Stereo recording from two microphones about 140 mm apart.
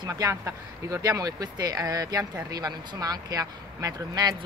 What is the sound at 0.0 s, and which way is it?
Speech, 25° right (ahead or behind).